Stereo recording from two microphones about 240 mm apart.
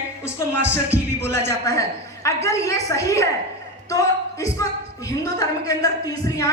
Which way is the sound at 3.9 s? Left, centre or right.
Centre.